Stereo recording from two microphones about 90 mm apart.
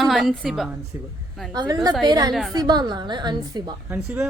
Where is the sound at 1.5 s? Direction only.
45° right (ahead or behind).